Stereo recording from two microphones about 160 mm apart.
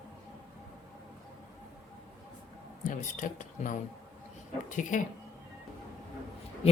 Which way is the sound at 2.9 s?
55° left (ahead or behind).